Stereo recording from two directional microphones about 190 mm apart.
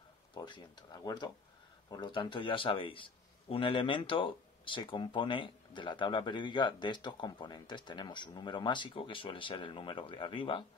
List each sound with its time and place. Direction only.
0.3 s a man's voice: 25° left (ahead or behind)